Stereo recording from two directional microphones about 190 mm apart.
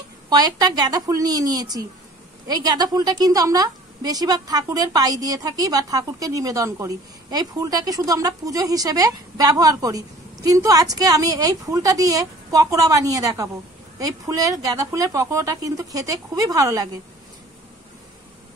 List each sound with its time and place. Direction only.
0.3 s a woman's voice: 20° right (ahead or behind)